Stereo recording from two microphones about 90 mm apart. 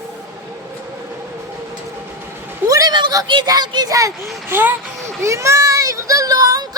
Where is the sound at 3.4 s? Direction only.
50° right (ahead or behind).